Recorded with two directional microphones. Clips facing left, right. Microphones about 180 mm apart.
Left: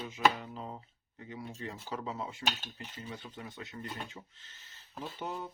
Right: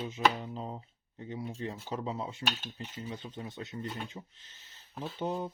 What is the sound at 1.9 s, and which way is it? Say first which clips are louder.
Speech: right 1 dB; 20° right (ahead or behind).